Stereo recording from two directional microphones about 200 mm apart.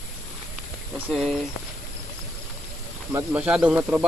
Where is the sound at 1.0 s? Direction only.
Centre (ahead or behind).